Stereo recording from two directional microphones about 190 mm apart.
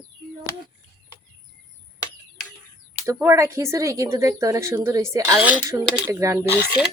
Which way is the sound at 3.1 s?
15° right (ahead or behind).